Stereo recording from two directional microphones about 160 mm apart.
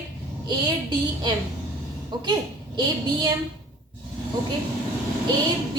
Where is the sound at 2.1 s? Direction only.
30° right (ahead or behind).